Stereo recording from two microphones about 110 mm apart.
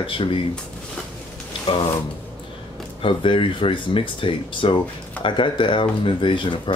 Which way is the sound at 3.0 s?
50° left (ahead or behind).